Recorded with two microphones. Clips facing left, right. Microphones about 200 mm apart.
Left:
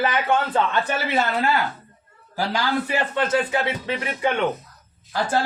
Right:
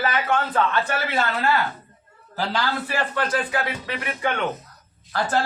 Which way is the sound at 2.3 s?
15° left (ahead or behind).